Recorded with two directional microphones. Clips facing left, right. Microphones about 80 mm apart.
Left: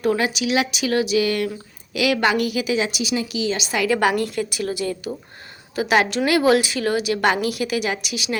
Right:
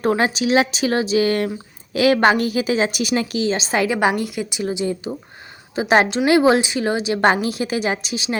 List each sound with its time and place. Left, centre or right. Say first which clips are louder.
0.0 s speech: right 2 dB; right
3.8 s a woman's voice: left 4 dB; centre